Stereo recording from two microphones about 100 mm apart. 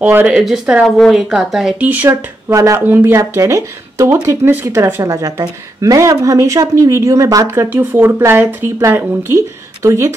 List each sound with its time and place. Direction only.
0.0 s speech: 15° right (ahead or behind)
1.9 s speech: 20° right (ahead or behind)
2.5 s a woman's voice: 30° right (ahead or behind)
2.9 s speech: 20° right (ahead or behind)
3.2 s speech: 30° right (ahead or behind)
5.0 s a woman's voice: 35° right (ahead or behind)